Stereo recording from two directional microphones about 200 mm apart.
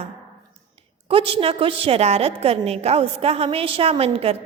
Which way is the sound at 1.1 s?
25° right (ahead or behind).